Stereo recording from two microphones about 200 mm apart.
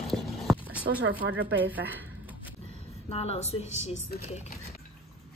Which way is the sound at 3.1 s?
30° left (ahead or behind).